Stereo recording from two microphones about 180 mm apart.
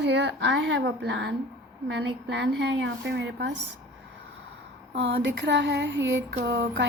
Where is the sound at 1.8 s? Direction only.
75° right (ahead or behind).